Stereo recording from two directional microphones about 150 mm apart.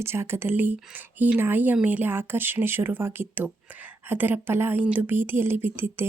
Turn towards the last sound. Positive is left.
turn(degrees=-15)  # may be behind; listen again after turning